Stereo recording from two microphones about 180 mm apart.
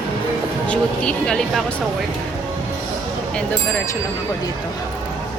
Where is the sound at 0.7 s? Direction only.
5° left (ahead or behind).